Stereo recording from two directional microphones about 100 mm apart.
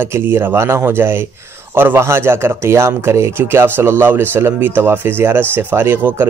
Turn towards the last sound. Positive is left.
turn(degrees=-20)  # may be behind; listen again after turning